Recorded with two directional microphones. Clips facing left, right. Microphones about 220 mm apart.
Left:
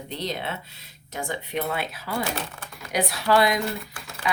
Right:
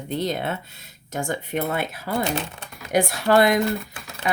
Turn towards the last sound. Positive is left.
turn(degrees=-50)  # may be behind; listen again after turning